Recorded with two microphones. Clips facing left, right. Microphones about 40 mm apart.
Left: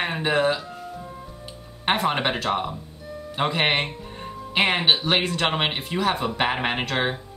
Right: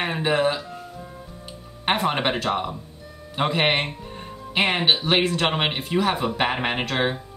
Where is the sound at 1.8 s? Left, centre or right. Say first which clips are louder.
Even; centre.